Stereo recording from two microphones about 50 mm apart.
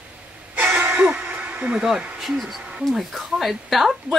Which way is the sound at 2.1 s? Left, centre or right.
Centre.